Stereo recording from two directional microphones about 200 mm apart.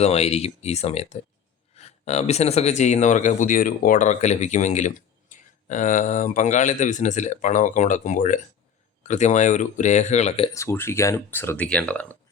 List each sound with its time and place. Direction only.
0.0 s speech: 30° left (ahead or behind)
10.5 s speech: 15° left (ahead or behind)